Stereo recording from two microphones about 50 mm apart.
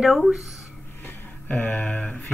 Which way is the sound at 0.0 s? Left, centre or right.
Centre.